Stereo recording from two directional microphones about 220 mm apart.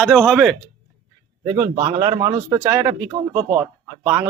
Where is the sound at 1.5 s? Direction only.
20° right (ahead or behind).